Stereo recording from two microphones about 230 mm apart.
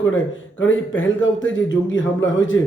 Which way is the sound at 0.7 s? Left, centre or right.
Left.